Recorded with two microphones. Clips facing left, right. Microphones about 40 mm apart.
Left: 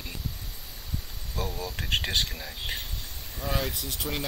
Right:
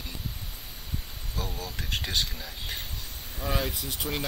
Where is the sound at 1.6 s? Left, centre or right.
Left.